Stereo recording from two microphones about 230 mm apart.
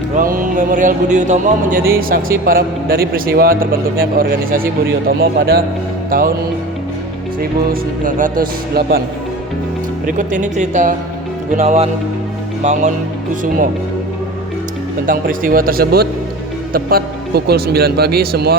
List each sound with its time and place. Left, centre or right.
0.2 s a man's voice: right
7.7 s a man's voice: right
10.1 s a man's voice: right
15.0 s a man's voice: right